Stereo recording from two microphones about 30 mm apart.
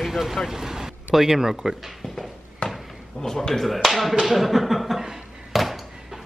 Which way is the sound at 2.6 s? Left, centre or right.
Left.